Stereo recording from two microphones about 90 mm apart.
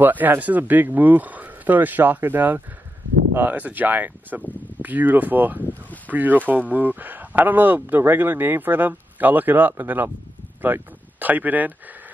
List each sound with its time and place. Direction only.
0.0 s speech: 20° right (ahead or behind)